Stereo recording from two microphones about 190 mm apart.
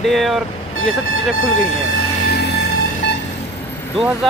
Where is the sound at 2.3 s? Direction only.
55° left (ahead or behind).